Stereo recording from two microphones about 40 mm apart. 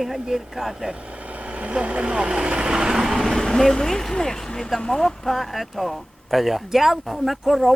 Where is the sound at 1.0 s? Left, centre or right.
Right; by 3.4 s centre.